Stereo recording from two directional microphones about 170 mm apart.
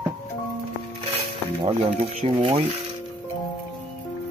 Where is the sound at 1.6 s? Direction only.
35° right (ahead or behind).